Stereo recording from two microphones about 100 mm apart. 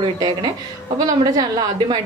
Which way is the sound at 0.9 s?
40° right (ahead or behind).